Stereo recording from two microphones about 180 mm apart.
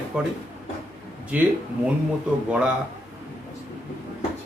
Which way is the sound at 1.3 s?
5° right (ahead or behind).